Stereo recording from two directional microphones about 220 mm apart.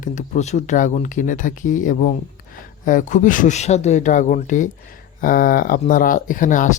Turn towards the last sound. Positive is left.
turn(degrees=35)  # may be behind; listen again after turning